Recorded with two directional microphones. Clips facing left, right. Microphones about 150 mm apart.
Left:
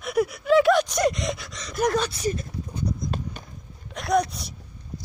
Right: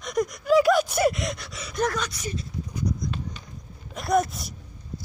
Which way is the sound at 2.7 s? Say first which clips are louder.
Even; 30° left (ahead or behind).